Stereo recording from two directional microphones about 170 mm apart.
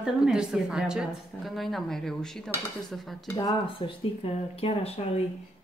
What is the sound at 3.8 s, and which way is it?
Speech, 35° left (ahead or behind).